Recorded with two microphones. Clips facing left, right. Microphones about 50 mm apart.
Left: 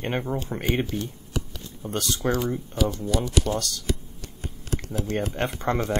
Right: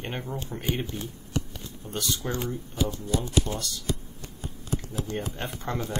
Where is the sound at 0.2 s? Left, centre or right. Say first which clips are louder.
Left 6 dB; left.